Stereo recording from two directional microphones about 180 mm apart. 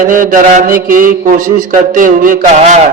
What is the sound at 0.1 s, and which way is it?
Mantra, 50° right (ahead or behind).